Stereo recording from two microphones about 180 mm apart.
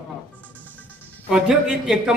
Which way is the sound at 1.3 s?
5° right (ahead or behind).